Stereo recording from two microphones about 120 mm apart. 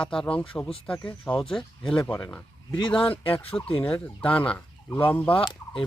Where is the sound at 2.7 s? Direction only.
45° left (ahead or behind).